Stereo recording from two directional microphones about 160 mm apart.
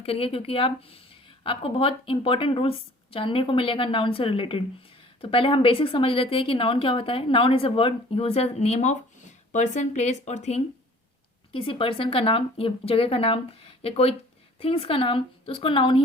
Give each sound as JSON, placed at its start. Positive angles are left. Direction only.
{"t": 0.0, "sound": "a woman's voice", "side_deg": 35}